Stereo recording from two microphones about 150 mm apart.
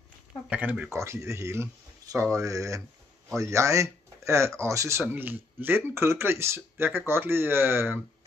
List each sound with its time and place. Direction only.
0.5 s speech: 10° right (ahead or behind)